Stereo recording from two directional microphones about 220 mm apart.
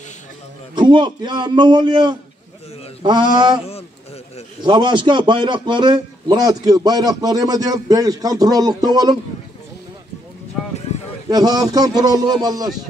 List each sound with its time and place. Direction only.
0.7 s a man's voice: 20° right (ahead or behind)
4.6 s a man's voice: 20° right (ahead or behind)
11.2 s a man's voice: 15° right (ahead or behind)